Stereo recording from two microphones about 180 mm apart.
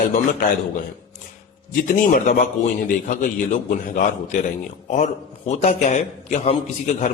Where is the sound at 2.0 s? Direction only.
50° left (ahead or behind).